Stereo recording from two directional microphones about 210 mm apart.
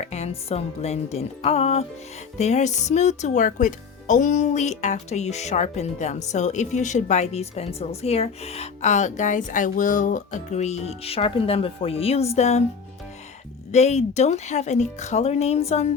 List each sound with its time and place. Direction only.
0.0 s music: 30° left (ahead or behind)
2.4 s speech: 30° left (ahead or behind)
13.7 s speech: 30° left (ahead or behind)